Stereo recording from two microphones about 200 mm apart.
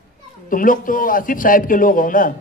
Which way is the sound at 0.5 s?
45° left (ahead or behind).